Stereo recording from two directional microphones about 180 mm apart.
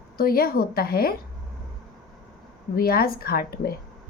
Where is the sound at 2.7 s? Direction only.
55° left (ahead or behind).